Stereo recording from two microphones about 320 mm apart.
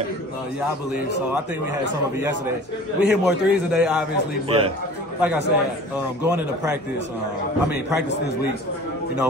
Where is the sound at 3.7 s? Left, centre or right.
Centre.